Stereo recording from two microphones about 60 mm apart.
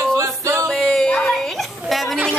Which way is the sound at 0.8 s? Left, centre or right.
Centre.